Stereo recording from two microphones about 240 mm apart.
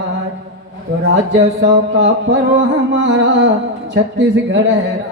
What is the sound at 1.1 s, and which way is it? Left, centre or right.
Speech, right.